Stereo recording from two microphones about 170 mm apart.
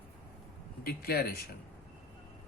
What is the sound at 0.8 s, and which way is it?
Speech, 60° left (ahead or behind).